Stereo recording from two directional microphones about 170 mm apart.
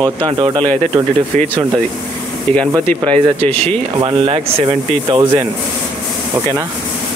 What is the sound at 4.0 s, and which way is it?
Speech, 30° right (ahead or behind).